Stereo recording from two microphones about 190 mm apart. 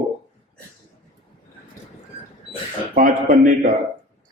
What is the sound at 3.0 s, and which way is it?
Speech, 45° right (ahead or behind).